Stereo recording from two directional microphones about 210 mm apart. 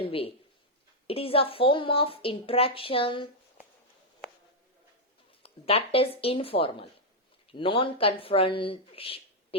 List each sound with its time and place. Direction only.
0.0 s a woman's voice: 25° left (ahead or behind)
5.4 s a woman's voice: 25° left (ahead or behind)